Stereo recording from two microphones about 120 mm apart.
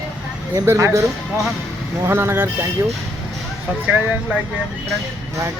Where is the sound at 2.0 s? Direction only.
20° right (ahead or behind).